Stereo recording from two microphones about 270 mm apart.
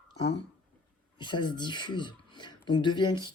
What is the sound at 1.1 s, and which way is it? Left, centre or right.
Speech, centre.